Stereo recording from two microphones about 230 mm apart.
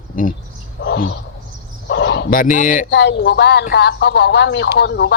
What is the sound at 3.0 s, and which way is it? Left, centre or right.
Speech, left.